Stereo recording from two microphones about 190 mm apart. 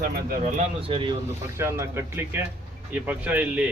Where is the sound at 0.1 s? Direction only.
45° right (ahead or behind); by 1.1 s 25° right (ahead or behind).